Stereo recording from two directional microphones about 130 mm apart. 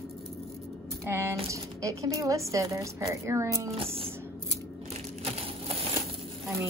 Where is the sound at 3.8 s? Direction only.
45° right (ahead or behind).